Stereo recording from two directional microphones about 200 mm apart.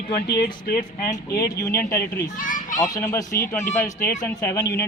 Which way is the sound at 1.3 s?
20° left (ahead or behind).